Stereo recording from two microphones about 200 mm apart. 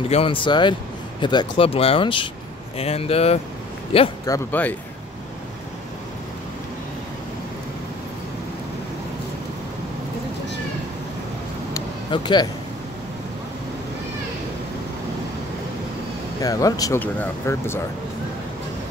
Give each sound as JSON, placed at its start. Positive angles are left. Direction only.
{"t": 0.1, "sound": "speech", "side_deg": 25}
{"t": 4.3, "sound": "speech", "side_deg": 10}
{"t": 11.7, "sound": "vehicle", "side_deg": 20}
{"t": 16.3, "sound": "speech", "side_deg": 15}